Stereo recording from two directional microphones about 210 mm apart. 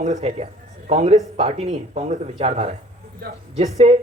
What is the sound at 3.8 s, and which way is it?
Speech, 30° right (ahead or behind).